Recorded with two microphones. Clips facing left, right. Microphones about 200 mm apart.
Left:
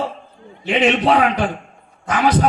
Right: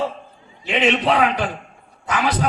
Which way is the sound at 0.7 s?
40° left (ahead or behind).